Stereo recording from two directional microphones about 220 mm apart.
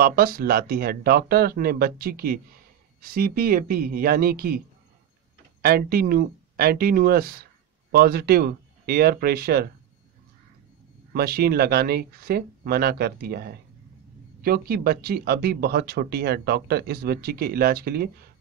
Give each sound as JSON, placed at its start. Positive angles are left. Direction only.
{"t": 0.0, "sound": "speech", "side_deg": -40}
{"t": 5.6, "sound": "speech", "side_deg": -45}
{"t": 11.1, "sound": "speech", "side_deg": -45}